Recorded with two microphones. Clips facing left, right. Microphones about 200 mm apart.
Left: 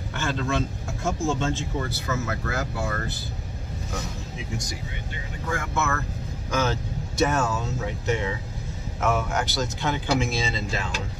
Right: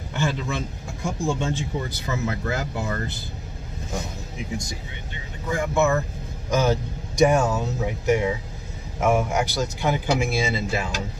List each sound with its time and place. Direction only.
0.1 s speech: 15° right (ahead or behind)
5.5 s speech: 15° right (ahead or behind)